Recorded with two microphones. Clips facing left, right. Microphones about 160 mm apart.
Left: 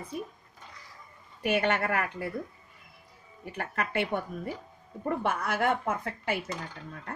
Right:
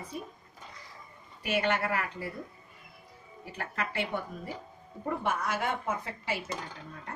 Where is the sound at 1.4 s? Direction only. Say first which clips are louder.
Left 2 dB; 55° left (ahead or behind).